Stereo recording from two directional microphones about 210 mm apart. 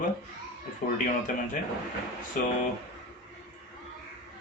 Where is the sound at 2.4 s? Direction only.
40° left (ahead or behind).